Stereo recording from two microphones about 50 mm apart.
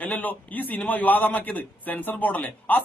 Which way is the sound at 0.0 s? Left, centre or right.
Left.